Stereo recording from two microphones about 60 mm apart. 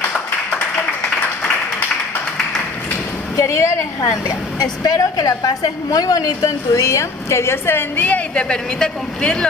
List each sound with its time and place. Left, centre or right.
3.3 s a woman's voice: left
7.7 s a woman's voice: left; by 9.5 s centre